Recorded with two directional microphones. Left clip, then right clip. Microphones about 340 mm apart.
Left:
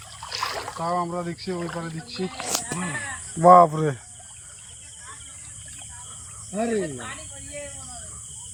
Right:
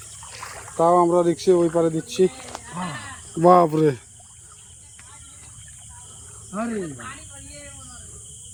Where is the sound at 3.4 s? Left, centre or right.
Centre.